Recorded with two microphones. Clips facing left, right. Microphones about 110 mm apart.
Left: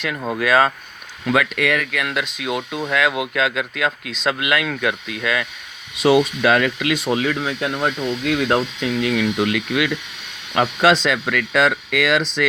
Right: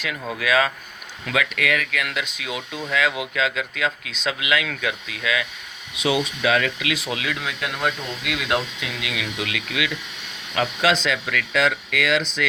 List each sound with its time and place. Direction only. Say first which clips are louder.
0.3 s speech: left 4 dB; 40° left (ahead or behind)
7.0 s speech: left 7 dB; 35° left (ahead or behind)